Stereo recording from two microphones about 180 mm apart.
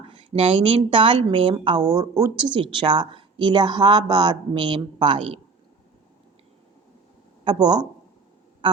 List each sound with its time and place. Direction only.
0.0 s speech: 30° right (ahead or behind)
7.4 s speech: 25° right (ahead or behind)